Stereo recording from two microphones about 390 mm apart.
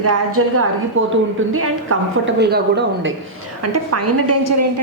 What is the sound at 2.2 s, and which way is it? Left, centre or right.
Speech, right.